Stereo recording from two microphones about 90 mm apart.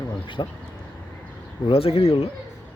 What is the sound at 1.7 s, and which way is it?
Speech, 90° left.